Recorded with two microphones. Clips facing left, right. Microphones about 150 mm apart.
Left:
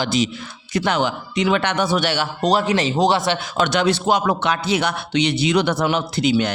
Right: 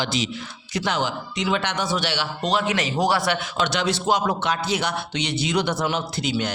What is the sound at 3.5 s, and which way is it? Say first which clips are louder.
A man's voice: left 5 dB; 50° left (ahead or behind).